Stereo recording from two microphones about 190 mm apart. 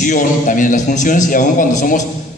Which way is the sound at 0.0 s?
40° left (ahead or behind).